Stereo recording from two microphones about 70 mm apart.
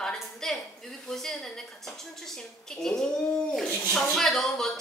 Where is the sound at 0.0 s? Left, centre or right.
Centre.